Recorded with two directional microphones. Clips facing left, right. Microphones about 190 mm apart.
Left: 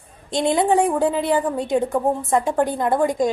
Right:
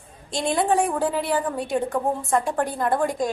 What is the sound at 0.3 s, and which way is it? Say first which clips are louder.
A woman's voice: left 4 dB; 20° left (ahead or behind).